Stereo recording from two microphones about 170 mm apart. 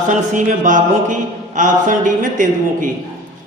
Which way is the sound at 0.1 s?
50° right (ahead or behind).